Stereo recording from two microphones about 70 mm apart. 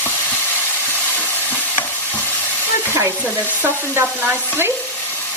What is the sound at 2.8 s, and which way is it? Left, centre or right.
Stir, right.